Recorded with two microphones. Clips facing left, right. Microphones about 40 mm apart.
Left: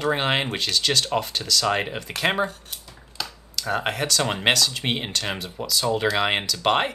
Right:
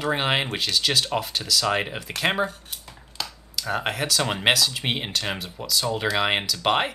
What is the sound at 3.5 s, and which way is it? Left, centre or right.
Speech, centre.